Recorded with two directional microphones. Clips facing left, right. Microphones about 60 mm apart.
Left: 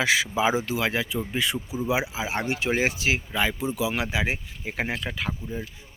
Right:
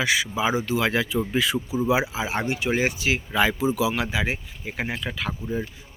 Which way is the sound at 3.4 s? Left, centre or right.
Centre.